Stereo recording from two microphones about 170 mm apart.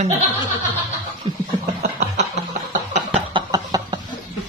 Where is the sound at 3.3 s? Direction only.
25° right (ahead or behind).